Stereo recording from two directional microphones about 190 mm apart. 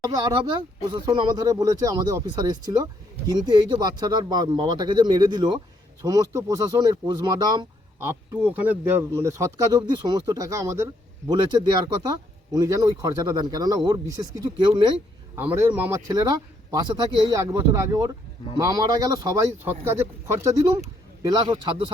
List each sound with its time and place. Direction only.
0.0 s speech: 20° right (ahead or behind)
12.5 s speech: 15° right (ahead or behind)
14.9 s speech: 10° right (ahead or behind)